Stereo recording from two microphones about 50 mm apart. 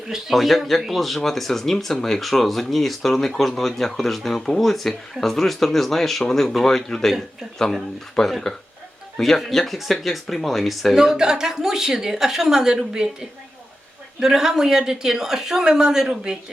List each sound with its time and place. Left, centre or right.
0.1 s speech: centre
8.1 s speech: centre
10.9 s speech: centre
14.2 s speech: centre